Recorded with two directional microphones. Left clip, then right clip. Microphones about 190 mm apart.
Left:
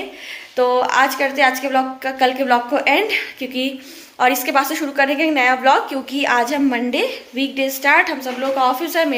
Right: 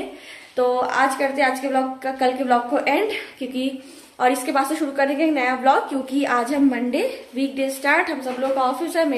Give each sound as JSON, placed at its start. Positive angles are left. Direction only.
{"t": 0.6, "sound": "a woman's voice", "side_deg": 0}